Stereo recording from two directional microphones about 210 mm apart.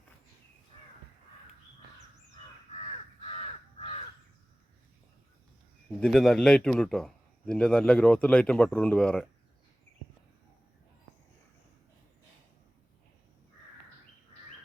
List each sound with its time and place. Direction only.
2.7 s crow: 30° left (ahead or behind)
6.0 s a man's voice: centre (ahead or behind)